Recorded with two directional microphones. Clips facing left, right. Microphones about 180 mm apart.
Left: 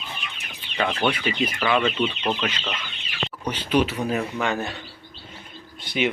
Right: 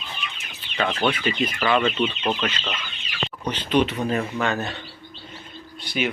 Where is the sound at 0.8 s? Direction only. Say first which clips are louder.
Right 1 dB; 10° left (ahead or behind).